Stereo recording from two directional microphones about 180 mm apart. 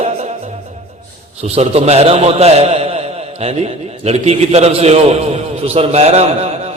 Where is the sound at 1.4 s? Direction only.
35° right (ahead or behind).